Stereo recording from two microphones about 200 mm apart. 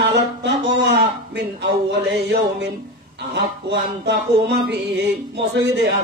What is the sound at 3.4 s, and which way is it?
Music, 55° right (ahead or behind).